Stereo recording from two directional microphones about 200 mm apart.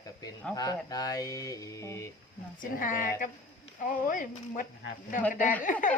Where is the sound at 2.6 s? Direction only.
40° left (ahead or behind).